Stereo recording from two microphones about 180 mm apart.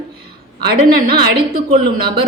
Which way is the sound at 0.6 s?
60° right (ahead or behind).